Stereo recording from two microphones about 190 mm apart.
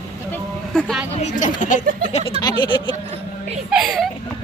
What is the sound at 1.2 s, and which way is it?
Speech, 40° left (ahead or behind).